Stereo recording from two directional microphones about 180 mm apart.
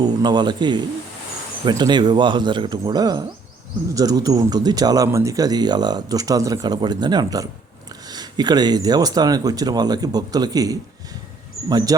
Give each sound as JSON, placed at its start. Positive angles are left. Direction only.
{"t": 0.0, "sound": "speech", "side_deg": -25}
{"t": 11.9, "sound": "speech", "side_deg": -20}